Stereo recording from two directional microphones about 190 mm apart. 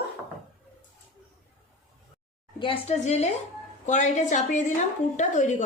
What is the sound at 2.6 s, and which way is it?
Speech, 30° left (ahead or behind).